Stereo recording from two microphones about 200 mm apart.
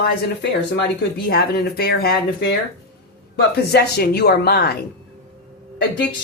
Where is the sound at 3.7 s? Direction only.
55° left (ahead or behind).